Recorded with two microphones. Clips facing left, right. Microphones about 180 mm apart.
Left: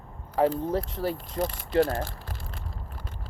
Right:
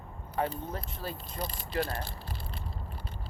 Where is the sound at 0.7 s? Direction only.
90° left.